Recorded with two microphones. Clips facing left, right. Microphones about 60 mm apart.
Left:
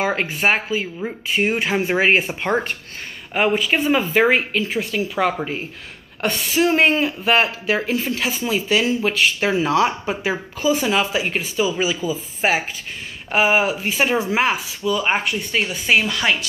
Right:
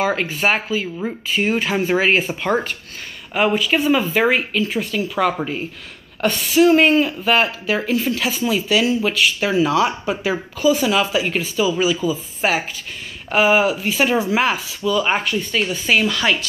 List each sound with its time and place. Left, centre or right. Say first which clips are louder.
0.0 s speech: right 1 dB; left